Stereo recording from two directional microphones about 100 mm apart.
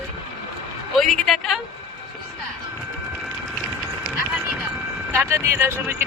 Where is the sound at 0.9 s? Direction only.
Centre (ahead or behind).